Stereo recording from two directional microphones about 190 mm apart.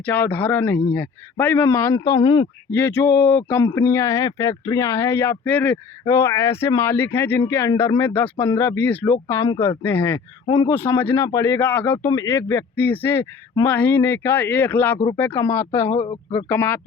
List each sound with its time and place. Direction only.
0.0 s speech: 10° left (ahead or behind); by 2.5 s 25° left (ahead or behind)
2.6 s speech: 10° left (ahead or behind)
10.4 s a man's voice: 25° left (ahead or behind)
10.7 s speech: 10° left (ahead or behind)